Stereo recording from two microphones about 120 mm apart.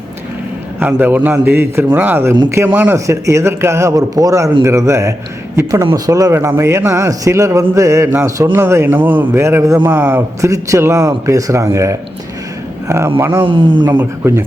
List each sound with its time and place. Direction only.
0.8 s a man's voice: 15° right (ahead or behind)
13.1 s a man's voice: 20° right (ahead or behind)
13.4 s speech: 45° right (ahead or behind)
14.0 s a man's voice: 20° right (ahead or behind)